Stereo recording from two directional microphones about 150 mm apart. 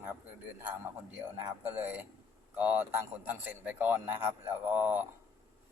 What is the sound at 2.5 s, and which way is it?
Speech, 10° right (ahead or behind).